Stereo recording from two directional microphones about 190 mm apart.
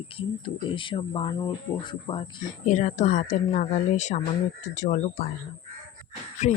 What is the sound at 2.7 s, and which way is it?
Speech, 40° left (ahead or behind).